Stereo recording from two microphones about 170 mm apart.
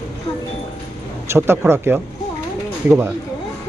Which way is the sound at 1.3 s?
15° right (ahead or behind).